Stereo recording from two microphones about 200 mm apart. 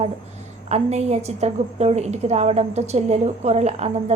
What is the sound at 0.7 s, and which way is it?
A woman's voice, 35° right (ahead or behind).